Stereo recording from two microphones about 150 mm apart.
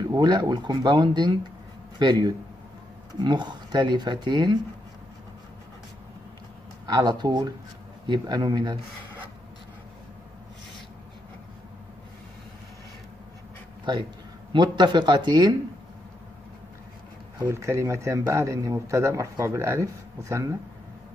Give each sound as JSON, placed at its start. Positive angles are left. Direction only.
{"t": 0.1, "sound": "speech", "side_deg": -30}
{"t": 6.9, "sound": "speech", "side_deg": -25}
{"t": 14.5, "sound": "speech", "side_deg": -30}
{"t": 17.4, "sound": "speech", "side_deg": -20}